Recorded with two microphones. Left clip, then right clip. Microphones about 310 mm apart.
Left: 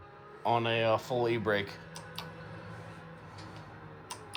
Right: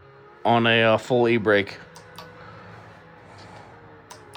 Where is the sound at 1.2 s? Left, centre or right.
Right.